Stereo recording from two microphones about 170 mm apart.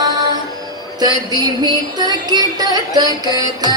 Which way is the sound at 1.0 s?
25° right (ahead or behind).